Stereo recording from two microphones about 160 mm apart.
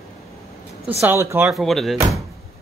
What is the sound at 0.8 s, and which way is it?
Speech, 15° right (ahead or behind).